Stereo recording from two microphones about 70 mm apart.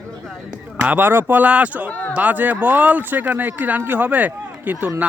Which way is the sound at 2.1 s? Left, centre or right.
Right.